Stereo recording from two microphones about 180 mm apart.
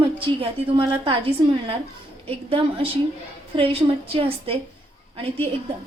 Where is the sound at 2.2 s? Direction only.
30° right (ahead or behind).